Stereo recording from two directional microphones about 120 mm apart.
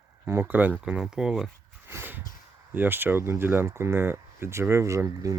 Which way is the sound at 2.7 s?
15° right (ahead or behind).